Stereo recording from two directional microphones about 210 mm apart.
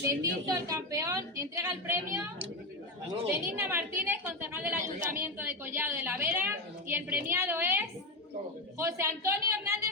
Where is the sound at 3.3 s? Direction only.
10° right (ahead or behind).